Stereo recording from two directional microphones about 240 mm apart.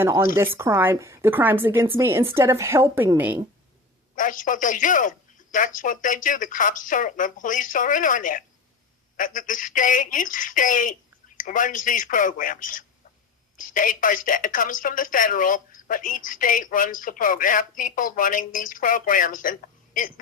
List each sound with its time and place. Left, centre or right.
0.0 s speech: centre
4.1 s speech: left